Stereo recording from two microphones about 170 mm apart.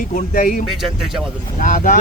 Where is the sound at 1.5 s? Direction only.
50° left (ahead or behind).